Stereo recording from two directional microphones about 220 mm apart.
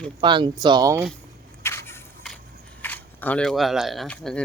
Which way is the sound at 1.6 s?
10° left (ahead or behind).